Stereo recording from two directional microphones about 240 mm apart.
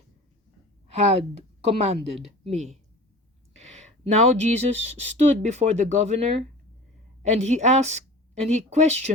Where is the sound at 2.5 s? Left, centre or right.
Right.